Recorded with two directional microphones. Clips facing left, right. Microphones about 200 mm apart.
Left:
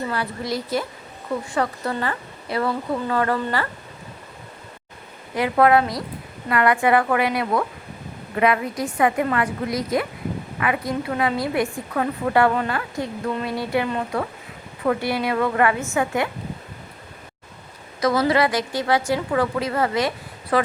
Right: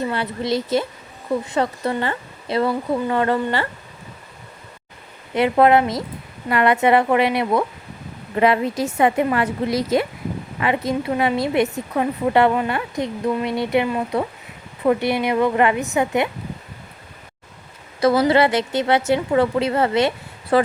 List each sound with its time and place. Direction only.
0.1 s speech: 25° right (ahead or behind)
5.3 s speech: 25° right (ahead or behind)
14.8 s speech: 20° right (ahead or behind)
18.2 s speech: 25° right (ahead or behind)